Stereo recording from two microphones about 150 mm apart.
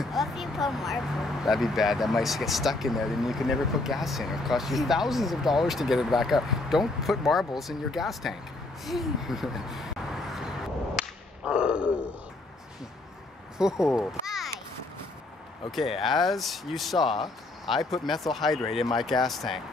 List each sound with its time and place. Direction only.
0.0 s speech: centre (ahead or behind)
11.0 s whip: 5° right (ahead or behind)
13.6 s speech: 5° right (ahead or behind)
13.9 s a sound: centre (ahead or behind)
15.7 s speech: centre (ahead or behind)